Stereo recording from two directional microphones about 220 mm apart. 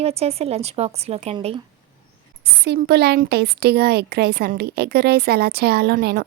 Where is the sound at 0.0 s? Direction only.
25° right (ahead or behind).